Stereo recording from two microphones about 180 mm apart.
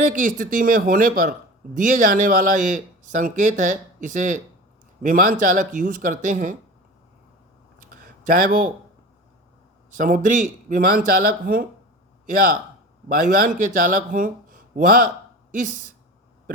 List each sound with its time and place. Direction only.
0.1 s speech: 45° right (ahead or behind)
8.3 s speech: 50° right (ahead or behind)
10.0 s speech: 50° right (ahead or behind)
13.2 s speech: 45° right (ahead or behind)